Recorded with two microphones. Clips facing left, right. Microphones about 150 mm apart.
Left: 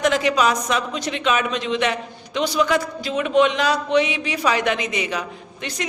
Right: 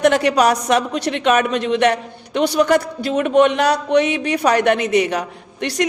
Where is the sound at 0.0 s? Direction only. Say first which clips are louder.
Right 4 dB; 65° right (ahead or behind).